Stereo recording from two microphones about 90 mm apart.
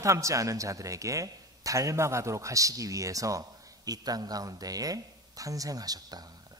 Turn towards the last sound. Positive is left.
turn(degrees=-45)  # may be behind; listen again after turning